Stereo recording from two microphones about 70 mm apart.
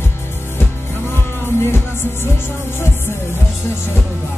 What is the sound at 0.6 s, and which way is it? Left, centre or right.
Music, left.